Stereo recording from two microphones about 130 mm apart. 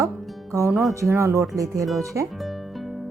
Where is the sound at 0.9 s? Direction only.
20° right (ahead or behind).